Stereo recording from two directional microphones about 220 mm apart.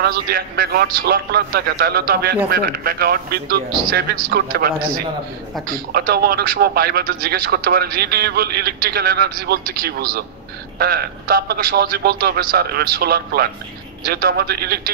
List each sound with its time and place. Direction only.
0.0 s speech: 45° right (ahead or behind)
5.9 s speech: 45° right (ahead or behind)